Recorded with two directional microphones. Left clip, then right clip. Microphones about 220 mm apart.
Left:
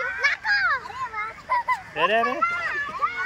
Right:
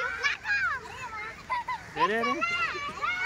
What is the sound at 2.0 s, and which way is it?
Speech, centre (ahead or behind).